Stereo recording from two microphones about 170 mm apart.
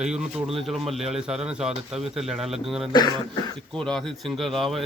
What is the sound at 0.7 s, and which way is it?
Speech, centre (ahead or behind).